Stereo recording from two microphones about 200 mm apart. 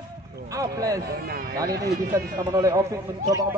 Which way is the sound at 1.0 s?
50° right (ahead or behind).